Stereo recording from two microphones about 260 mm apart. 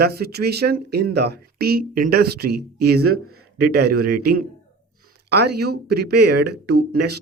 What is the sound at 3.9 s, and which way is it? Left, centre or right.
Speech, right.